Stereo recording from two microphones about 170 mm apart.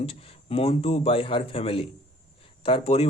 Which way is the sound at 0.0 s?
35° left (ahead or behind).